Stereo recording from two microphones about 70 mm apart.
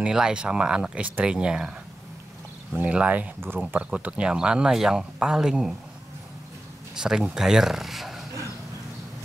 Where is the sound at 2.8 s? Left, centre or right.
Centre.